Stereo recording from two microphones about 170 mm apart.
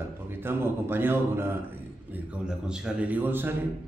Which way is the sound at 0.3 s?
15° right (ahead or behind).